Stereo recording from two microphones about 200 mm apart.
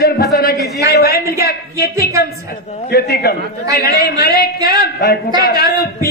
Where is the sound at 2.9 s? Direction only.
50° left (ahead or behind).